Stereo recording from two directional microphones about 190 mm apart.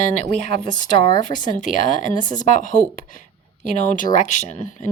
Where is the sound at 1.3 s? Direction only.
40° left (ahead or behind).